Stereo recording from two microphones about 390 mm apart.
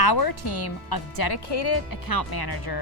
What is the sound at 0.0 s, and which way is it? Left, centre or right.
Speech, left.